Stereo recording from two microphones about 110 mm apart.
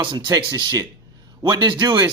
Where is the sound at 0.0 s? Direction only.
45° right (ahead or behind).